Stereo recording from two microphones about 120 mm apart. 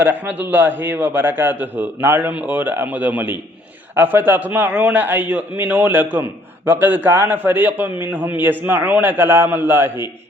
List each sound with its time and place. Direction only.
0.0 s a man's voice: 15° right (ahead or behind)